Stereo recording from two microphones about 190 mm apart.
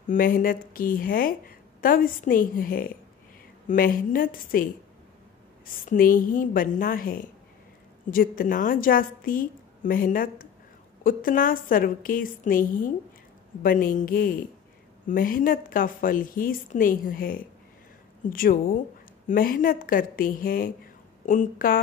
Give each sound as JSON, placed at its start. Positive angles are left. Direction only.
{"t": 0.1, "sound": "a woman's voice", "side_deg": 50}
{"t": 5.9, "sound": "a woman's voice", "side_deg": 45}